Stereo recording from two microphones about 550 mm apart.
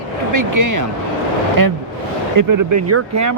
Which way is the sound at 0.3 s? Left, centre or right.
Right.